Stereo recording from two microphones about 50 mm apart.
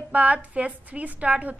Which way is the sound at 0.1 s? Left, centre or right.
Right.